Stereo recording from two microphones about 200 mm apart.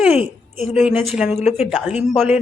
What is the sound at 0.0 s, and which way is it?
Speech, 5° right (ahead or behind).